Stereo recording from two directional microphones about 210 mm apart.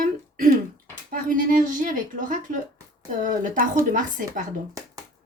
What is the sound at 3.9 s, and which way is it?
Speech, 40° right (ahead or behind).